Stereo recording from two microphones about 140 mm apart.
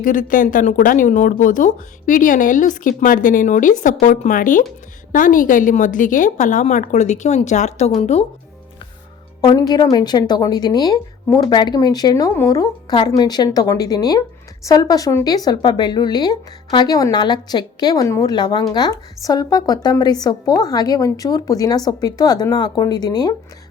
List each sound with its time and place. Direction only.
0.0 s a woman's voice: 70° left (ahead or behind); by 8.2 s 50° left (ahead or behind)
9.4 s speech: 30° left (ahead or behind)